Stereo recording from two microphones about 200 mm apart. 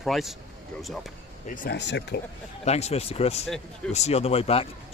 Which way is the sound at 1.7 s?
60° left (ahead or behind).